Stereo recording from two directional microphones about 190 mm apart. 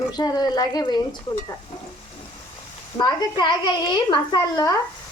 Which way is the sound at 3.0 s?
25° left (ahead or behind).